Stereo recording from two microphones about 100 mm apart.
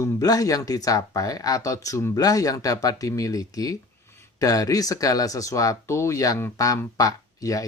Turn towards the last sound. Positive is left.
turn(degrees=35)  # may be behind; listen again after turning